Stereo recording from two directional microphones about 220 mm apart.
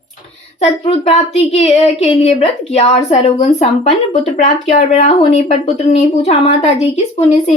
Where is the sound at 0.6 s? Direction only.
25° left (ahead or behind).